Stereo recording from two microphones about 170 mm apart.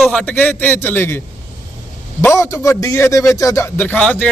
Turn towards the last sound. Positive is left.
turn(degrees=10)  # may be behind; listen again after turning